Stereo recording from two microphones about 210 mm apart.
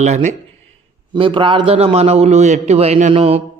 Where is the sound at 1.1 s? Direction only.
25° right (ahead or behind).